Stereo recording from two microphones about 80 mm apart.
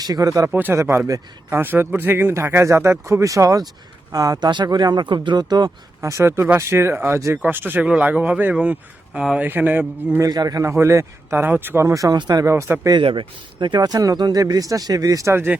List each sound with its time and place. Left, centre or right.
0.0 s speech: right
0.5 s speech: right
4.4 s speech: right
5.4 s speech: right
6.0 s speech: right
7.4 s speech: right
7.9 s speech: centre
10.2 s speech: right
10.6 s speech: right
11.3 s speech: right
12.1 s speech: right
12.5 s speech: right
12.9 s speech: right
15.3 s speech: right